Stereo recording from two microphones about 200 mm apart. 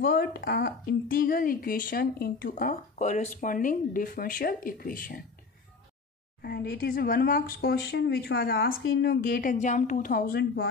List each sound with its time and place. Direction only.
0.0 s a woman's voice: 50° left (ahead or behind)
6.4 s a woman's voice: 50° left (ahead or behind)
9.2 s a woman's voice: 45° left (ahead or behind)